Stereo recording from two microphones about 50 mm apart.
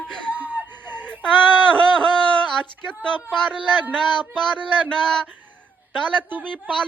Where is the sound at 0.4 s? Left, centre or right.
Right.